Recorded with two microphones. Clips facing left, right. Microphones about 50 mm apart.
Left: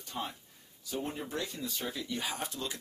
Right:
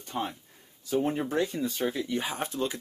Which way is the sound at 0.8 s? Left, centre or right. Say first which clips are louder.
Right 10 dB; right.